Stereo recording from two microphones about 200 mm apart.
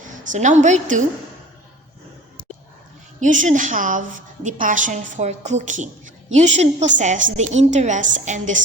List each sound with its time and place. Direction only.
0.3 s a woman's voice: 35° right (ahead or behind)
3.2 s a woman's voice: 40° right (ahead or behind)